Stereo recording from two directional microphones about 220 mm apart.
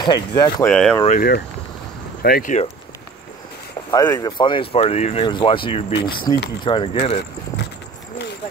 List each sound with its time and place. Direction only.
0.0 s speech: 20° left (ahead or behind)
0.7 s speech: 5° left (ahead or behind)
1.0 s speech: 40° left (ahead or behind)
3.9 s speech: 15° left (ahead or behind)